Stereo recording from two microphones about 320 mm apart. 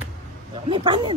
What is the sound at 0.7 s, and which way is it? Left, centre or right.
Speech, centre.